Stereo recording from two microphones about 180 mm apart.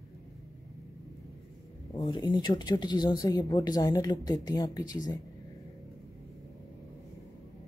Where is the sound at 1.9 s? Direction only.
25° left (ahead or behind).